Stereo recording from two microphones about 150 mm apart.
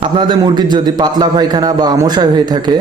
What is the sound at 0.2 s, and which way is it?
A man's voice, 30° right (ahead or behind).